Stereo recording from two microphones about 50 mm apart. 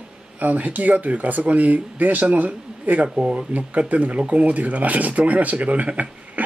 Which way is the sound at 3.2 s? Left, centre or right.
Right.